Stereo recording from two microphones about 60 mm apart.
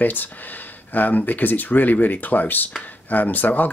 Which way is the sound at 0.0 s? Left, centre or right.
Left.